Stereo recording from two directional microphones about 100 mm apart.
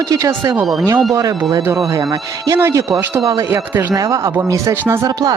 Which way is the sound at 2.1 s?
35° right (ahead or behind).